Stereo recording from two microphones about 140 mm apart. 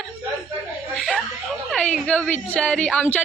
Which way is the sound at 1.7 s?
5° left (ahead or behind).